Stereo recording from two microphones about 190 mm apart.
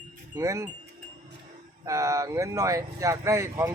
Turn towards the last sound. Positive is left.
turn(degrees=-15)  # may be behind; listen again after turning